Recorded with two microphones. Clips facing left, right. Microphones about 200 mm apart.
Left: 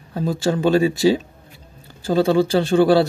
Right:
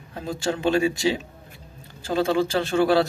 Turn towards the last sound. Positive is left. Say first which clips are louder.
# left 5 dB
turn(degrees=30)  # may be behind; listen again after turning